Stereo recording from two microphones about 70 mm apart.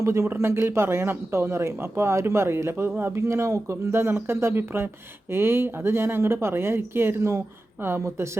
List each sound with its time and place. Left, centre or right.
0.0 s speech: right